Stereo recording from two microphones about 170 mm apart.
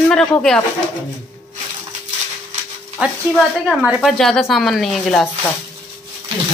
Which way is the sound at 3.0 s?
5° right (ahead or behind).